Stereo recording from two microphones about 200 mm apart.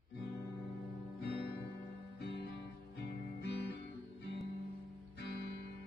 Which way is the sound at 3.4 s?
55° left (ahead or behind).